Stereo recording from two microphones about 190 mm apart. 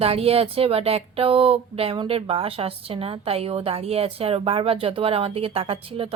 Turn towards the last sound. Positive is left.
turn(degrees=-30)  # may be behind; listen again after turning